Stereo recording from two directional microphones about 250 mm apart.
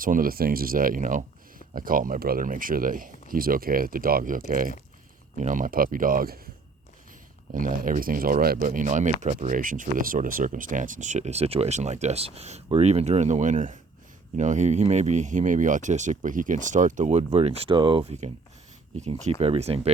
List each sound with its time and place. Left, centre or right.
0.0 s speech: right
7.5 s speech: right